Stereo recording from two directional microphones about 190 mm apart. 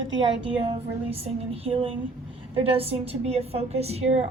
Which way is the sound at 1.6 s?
30° right (ahead or behind).